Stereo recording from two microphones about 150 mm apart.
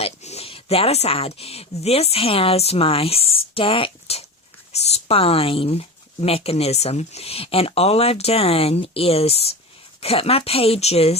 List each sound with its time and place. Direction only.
0.0 s speech: 45° left (ahead or behind)